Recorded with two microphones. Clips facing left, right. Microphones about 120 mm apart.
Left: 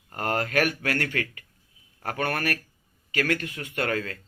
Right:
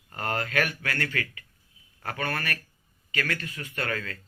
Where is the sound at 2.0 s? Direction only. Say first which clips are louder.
Left 3 dB; 45° left (ahead or behind).